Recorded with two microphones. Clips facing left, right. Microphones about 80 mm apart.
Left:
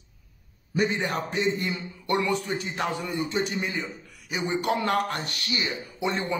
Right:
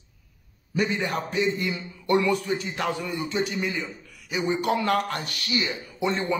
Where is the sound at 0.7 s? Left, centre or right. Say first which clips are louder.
Even; left.